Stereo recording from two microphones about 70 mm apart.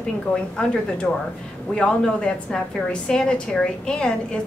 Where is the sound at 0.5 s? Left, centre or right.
Centre.